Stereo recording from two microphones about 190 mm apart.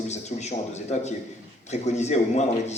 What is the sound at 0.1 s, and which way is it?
A man's voice, 35° left (ahead or behind).